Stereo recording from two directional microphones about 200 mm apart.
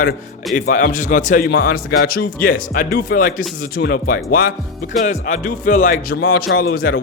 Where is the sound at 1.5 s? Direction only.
55° left (ahead or behind).